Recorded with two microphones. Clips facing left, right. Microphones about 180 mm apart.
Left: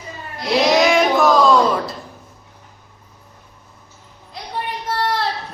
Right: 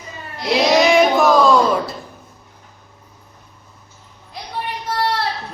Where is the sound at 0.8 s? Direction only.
5° right (ahead or behind).